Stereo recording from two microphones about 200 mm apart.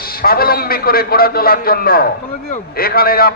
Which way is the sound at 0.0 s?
50° left (ahead or behind).